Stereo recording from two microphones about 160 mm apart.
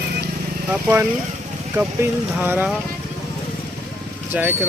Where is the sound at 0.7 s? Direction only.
15° right (ahead or behind).